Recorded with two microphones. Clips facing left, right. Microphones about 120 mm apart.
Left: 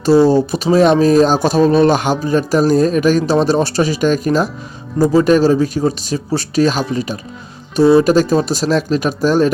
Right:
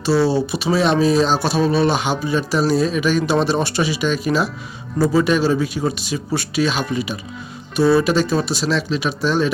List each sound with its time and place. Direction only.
0.0 s speech: 45° left (ahead or behind)